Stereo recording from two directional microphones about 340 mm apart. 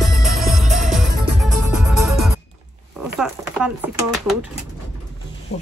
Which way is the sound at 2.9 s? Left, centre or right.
Centre.